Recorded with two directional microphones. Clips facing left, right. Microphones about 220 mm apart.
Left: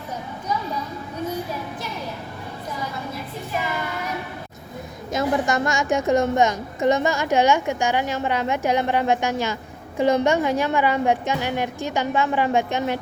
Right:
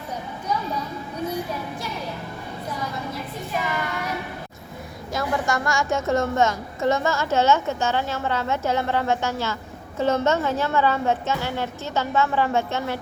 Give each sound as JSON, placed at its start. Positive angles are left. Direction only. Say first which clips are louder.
{"t": 5.1, "sound": "a woman's voice", "louder": "left 3 dB", "side_deg": 20}